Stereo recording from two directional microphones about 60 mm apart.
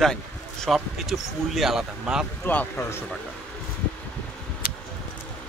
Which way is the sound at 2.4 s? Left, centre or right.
Left.